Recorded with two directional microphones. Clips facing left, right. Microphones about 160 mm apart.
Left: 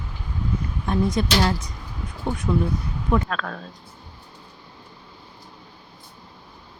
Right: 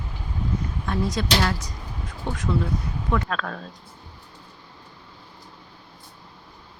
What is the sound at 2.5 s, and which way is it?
Speech, 20° left (ahead or behind).